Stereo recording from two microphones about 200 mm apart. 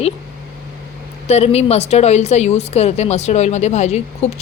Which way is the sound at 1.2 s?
30° left (ahead or behind).